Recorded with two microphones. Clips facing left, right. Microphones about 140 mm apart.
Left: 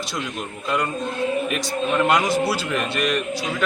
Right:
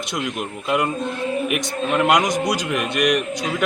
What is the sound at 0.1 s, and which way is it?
A man's voice, 20° right (ahead or behind).